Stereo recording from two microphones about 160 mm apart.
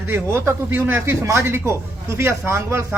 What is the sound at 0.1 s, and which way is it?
A man's voice, 15° right (ahead or behind).